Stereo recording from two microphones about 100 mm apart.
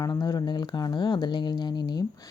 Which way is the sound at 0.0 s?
40° left (ahead or behind).